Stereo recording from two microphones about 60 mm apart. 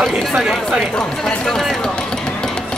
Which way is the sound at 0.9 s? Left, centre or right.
Centre.